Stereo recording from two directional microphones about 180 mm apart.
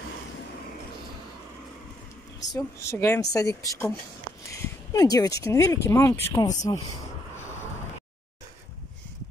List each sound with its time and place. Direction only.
2.5 s speech: 15° left (ahead or behind)